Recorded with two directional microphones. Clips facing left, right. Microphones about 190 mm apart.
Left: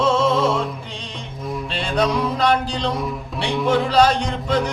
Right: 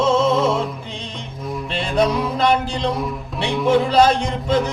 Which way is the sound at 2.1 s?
Centre (ahead or behind).